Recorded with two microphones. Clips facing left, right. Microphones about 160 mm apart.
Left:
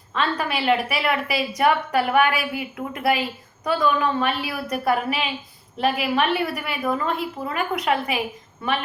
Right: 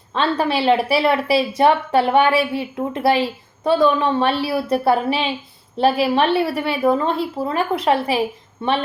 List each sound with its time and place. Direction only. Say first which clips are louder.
0.1 s a woman's voice: right 5 dB; 30° right (ahead or behind)